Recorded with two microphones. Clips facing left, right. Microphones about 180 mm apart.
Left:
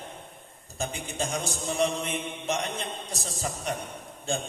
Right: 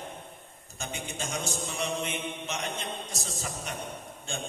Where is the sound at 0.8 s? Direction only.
35° left (ahead or behind).